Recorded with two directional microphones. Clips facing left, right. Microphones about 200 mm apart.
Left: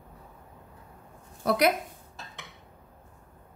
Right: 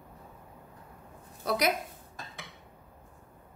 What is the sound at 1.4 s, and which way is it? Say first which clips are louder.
Speech: left 5 dB; 55° left (ahead or behind).